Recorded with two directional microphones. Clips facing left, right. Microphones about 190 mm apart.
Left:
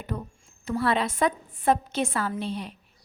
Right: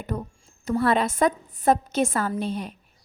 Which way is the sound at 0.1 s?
45° right (ahead or behind).